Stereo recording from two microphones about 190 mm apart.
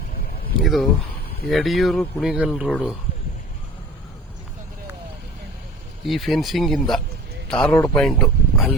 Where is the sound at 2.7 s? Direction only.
10° left (ahead or behind).